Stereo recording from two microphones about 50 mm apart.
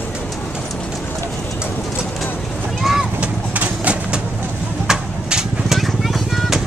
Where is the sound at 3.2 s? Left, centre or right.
Right.